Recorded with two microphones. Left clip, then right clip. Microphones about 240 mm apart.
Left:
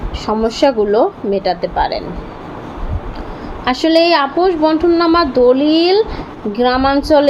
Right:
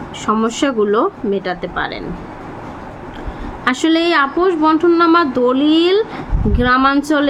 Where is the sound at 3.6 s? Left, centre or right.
Centre.